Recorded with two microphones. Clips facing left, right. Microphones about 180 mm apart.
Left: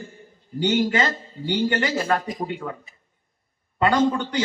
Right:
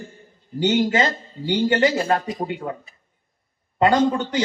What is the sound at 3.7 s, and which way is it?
Speech, 25° right (ahead or behind).